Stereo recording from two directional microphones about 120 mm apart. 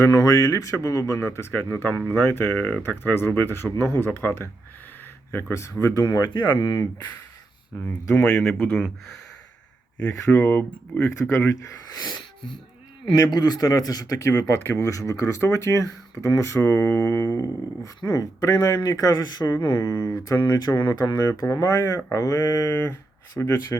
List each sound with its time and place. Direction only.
0.0 s speech: 30° left (ahead or behind)
6.0 s speech: 35° left (ahead or behind)
8.1 s speech: 10° left (ahead or behind)
10.1 s speech: 25° left (ahead or behind)